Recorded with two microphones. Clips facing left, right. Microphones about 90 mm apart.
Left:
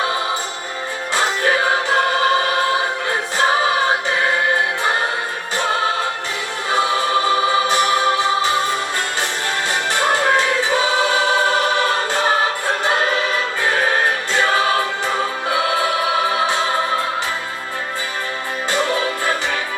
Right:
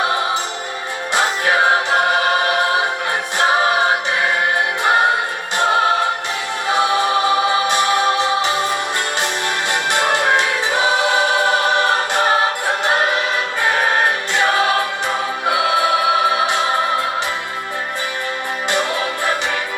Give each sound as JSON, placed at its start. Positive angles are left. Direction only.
{"t": 1.1, "sound": "music", "side_deg": -20}
{"t": 3.1, "sound": "choir", "side_deg": -20}
{"t": 6.7, "sound": "music", "side_deg": -20}
{"t": 9.9, "sound": "choir", "side_deg": -20}
{"t": 14.3, "sound": "choir", "side_deg": -20}
{"t": 16.3, "sound": "music", "side_deg": -20}
{"t": 18.7, "sound": "music", "side_deg": -20}